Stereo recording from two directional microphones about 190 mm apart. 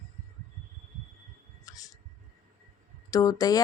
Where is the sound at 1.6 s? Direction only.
20° left (ahead or behind).